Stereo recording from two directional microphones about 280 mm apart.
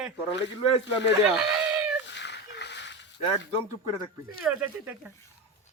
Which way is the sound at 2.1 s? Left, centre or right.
Left.